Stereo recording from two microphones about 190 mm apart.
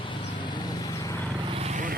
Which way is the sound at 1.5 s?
35° right (ahead or behind).